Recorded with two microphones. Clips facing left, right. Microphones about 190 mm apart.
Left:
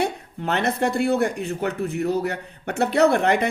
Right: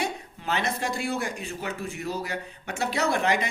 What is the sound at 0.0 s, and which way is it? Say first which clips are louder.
Speech: left 6 dB; 60° left (ahead or behind).